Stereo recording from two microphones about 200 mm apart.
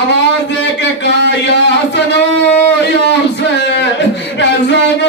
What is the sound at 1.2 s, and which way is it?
Speech, 60° left (ahead or behind).